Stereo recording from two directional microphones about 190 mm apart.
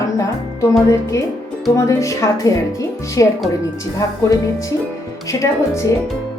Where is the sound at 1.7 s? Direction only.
15° left (ahead or behind).